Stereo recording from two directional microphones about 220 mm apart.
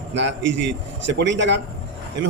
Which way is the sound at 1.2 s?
55° right (ahead or behind).